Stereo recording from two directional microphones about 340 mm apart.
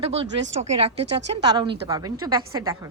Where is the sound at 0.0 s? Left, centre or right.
Centre.